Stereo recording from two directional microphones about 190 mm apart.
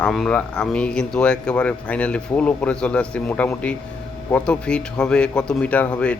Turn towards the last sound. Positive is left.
turn(degrees=5)  # may be behind; listen again after turning